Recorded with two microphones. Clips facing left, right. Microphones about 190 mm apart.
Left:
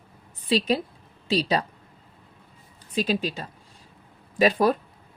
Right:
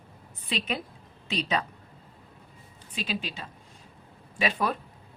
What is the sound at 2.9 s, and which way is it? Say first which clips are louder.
Speech: left 9 dB; 40° left (ahead or behind).